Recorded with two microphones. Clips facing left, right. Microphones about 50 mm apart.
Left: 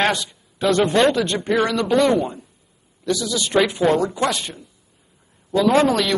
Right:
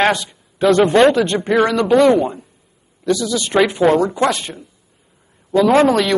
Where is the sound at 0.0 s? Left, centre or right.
Centre.